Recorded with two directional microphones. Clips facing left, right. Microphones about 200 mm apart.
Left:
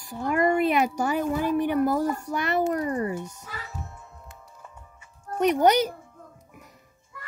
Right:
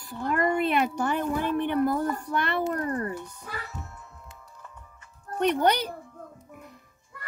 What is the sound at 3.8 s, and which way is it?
Music, 20° left (ahead or behind).